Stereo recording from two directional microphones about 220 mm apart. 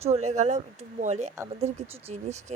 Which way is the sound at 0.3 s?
30° right (ahead or behind).